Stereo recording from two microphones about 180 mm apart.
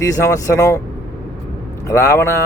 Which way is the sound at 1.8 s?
15° left (ahead or behind).